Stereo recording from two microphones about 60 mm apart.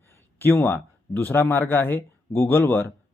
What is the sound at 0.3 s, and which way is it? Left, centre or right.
Speech, left.